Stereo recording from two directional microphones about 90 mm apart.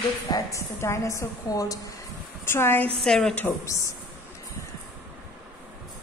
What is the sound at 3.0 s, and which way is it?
Speech, 5° left (ahead or behind).